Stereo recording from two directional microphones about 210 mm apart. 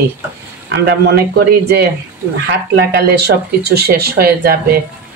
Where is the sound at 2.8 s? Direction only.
50° right (ahead or behind).